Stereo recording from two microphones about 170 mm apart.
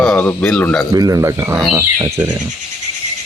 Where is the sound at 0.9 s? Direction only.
20° right (ahead or behind).